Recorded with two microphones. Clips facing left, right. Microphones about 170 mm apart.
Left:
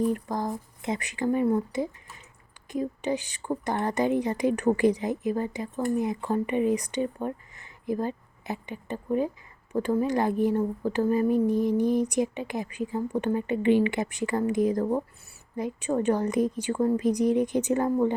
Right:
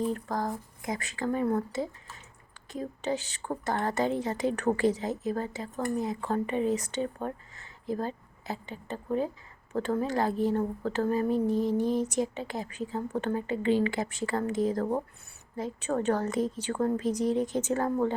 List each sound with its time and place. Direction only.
0.1 s a woman's voice: 15° left (ahead or behind)